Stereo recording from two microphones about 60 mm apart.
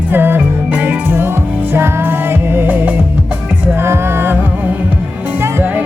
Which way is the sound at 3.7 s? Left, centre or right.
Right.